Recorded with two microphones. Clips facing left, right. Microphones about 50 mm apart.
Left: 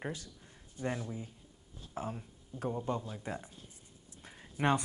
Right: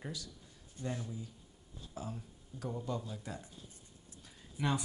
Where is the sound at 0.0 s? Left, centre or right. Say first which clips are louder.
Left 4 dB; left.